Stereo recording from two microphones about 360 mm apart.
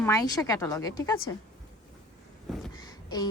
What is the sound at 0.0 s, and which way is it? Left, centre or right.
Speech, centre.